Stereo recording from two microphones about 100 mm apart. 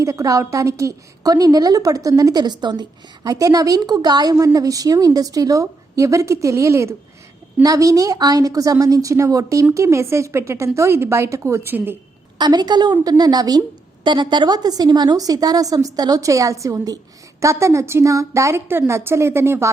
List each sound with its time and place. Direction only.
0.0 s a woman's voice: 35° right (ahead or behind)
3.2 s a woman's voice: 35° right (ahead or behind)
4.4 s a woman's voice: 35° right (ahead or behind)
12.4 s a woman's voice: 45° right (ahead or behind); by 19.7 s 25° right (ahead or behind)